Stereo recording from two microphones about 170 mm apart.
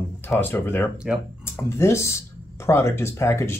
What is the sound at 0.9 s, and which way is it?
Speech, 5° right (ahead or behind).